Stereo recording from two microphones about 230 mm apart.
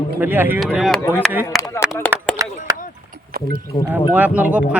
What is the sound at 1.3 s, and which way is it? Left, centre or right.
Speech, centre.